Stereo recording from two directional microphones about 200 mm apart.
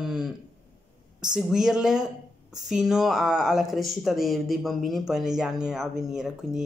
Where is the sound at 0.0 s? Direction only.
Centre (ahead or behind).